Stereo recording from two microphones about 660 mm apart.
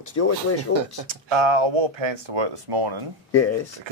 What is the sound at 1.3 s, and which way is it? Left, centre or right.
Speech, right.